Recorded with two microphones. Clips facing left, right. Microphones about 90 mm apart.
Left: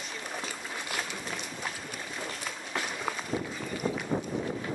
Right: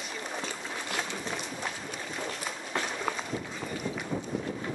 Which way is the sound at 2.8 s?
5° left (ahead or behind).